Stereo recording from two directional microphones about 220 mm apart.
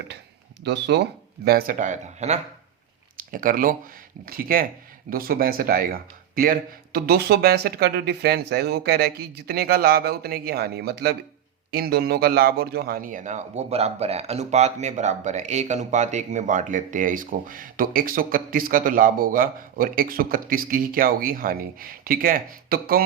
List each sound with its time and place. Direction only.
0.6 s a man's voice: 50° right (ahead or behind)